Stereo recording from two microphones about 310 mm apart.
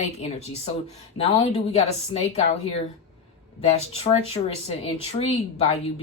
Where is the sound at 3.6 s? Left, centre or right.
Centre.